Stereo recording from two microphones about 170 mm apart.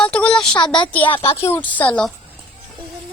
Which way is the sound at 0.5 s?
25° left (ahead or behind).